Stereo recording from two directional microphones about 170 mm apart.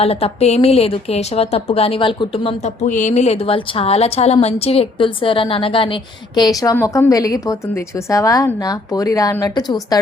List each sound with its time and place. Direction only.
0.0 s a woman's voice: 35° left (ahead or behind)
2.6 s a woman's voice: 45° left (ahead or behind); by 10.0 s 25° left (ahead or behind)